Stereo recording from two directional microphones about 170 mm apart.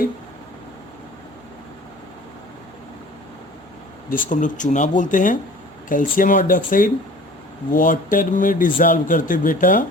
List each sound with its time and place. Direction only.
4.3 s a man's voice: 50° left (ahead or behind)